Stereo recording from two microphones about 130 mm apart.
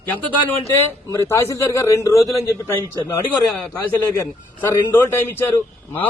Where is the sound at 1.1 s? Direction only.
20° left (ahead or behind).